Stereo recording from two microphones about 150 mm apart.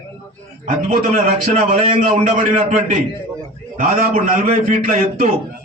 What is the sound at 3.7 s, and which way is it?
A man's voice, 55° right (ahead or behind).